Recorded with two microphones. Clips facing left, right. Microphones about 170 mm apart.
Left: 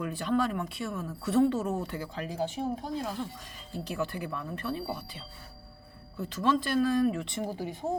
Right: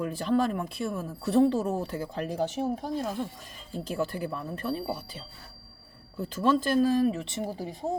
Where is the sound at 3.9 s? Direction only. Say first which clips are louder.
Right 3 dB; 40° right (ahead or behind).